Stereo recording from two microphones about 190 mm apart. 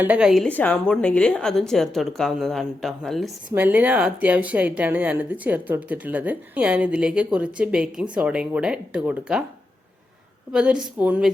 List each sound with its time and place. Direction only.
0.0 s a woman's voice: 5° right (ahead or behind)
10.5 s a woman's voice: 5° right (ahead or behind)